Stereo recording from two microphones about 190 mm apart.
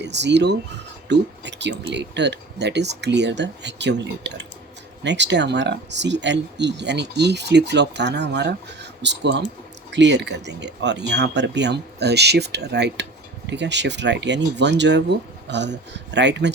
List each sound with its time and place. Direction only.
0.0 s speech: 65° right (ahead or behind)